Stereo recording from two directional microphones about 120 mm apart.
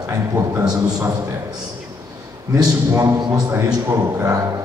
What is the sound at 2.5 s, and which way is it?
A man's voice, 30° right (ahead or behind).